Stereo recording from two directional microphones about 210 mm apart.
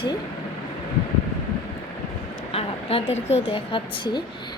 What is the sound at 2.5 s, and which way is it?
A woman's voice, 25° left (ahead or behind).